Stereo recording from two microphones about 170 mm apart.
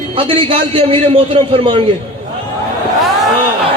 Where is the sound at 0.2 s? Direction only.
35° right (ahead or behind).